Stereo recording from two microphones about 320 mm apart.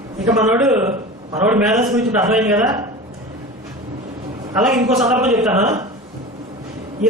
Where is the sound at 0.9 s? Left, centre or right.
Right.